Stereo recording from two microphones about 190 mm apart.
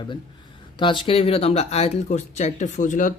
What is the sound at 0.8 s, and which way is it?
Speech, 25° left (ahead or behind).